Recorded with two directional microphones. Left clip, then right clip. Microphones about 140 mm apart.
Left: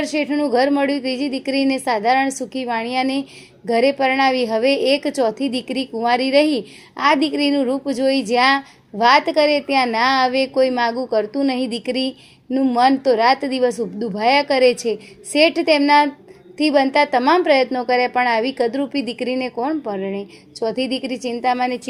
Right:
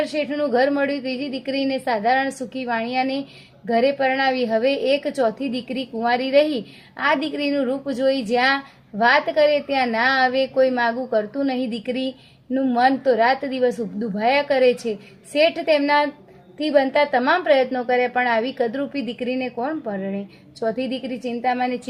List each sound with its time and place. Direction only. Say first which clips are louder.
0.0 s a woman's voice: left 2 dB; 35° left (ahead or behind)